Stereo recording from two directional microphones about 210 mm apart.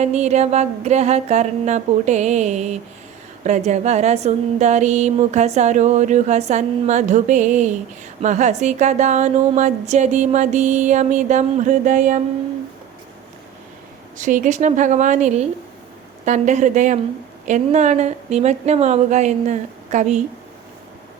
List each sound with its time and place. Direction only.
0.0 s speech: 30° right (ahead or behind)
14.2 s speech: 35° right (ahead or behind)